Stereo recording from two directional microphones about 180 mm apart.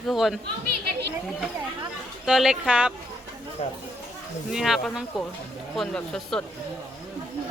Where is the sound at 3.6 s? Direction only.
35° left (ahead or behind).